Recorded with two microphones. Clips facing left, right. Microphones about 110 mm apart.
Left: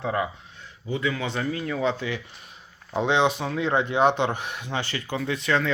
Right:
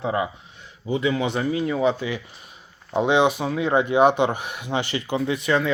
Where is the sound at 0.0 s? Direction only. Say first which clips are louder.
Right 2 dB; 15° right (ahead or behind).